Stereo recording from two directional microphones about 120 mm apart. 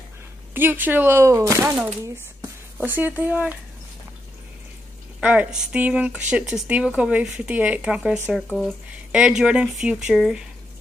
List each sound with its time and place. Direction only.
0.6 s speech: 15° right (ahead or behind)
1.8 s speech: 15° right (ahead or behind)
5.2 s speech: 10° right (ahead or behind)